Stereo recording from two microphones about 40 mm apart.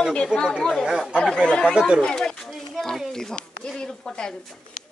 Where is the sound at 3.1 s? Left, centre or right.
Centre.